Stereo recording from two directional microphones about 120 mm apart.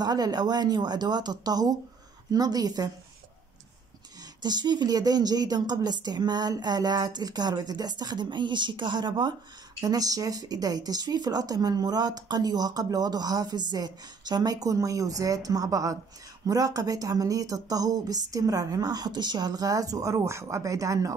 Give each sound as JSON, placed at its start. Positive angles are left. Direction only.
{"t": 0.0, "sound": "speech", "side_deg": -35}
{"t": 4.4, "sound": "speech", "side_deg": -35}